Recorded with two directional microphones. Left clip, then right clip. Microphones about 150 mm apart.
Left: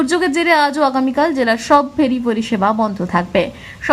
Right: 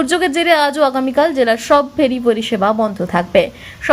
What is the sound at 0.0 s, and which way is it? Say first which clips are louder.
A woman's voice: right 1 dB; 15° right (ahead or behind).